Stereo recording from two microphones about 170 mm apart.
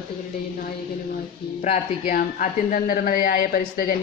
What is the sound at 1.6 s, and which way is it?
Speech, 50° left (ahead or behind).